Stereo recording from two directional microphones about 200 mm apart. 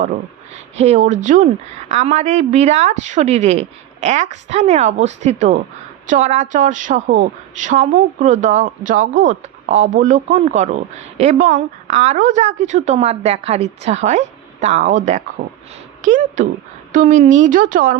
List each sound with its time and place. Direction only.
0.5 s a woman's voice: 35° right (ahead or behind)